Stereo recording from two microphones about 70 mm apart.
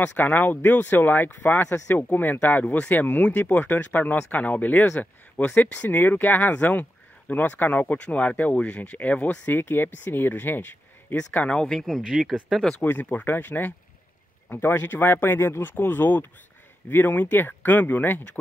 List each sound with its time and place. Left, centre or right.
0.0 s speech: left
11.1 s speech: centre
11.6 s speech: centre
12.8 s speech: left